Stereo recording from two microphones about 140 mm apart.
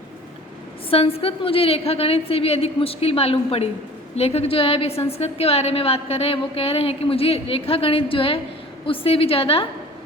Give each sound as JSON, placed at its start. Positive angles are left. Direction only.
{"t": 0.9, "sound": "a woman's voice", "side_deg": 45}